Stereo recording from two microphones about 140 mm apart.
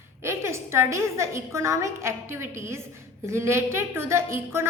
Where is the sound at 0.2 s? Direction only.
20° right (ahead or behind).